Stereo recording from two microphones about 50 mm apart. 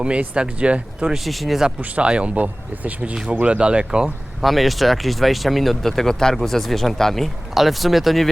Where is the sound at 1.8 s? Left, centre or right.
Right.